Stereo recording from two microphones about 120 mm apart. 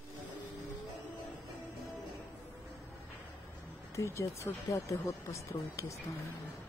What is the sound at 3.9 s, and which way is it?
Speech, 25° left (ahead or behind).